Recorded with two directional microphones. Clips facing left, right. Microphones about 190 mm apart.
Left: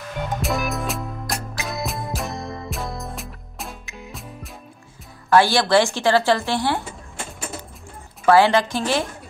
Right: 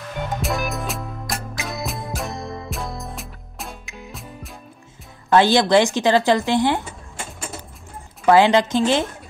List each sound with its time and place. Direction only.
0.2 s music: centre (ahead or behind)
5.3 s speech: 20° right (ahead or behind)
8.3 s speech: 20° right (ahead or behind)